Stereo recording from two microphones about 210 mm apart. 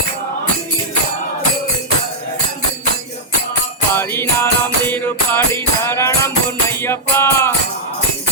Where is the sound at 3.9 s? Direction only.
10° left (ahead or behind).